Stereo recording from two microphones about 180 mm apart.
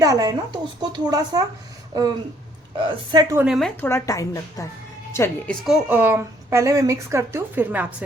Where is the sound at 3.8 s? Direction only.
15° left (ahead or behind).